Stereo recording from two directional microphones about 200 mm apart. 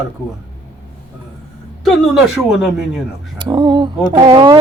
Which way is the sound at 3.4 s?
20° right (ahead or behind).